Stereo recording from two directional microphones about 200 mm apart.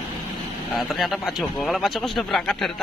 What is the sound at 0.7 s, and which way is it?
A man's voice, centre (ahead or behind).